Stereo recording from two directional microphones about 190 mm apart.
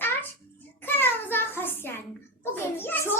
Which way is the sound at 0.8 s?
10° left (ahead or behind).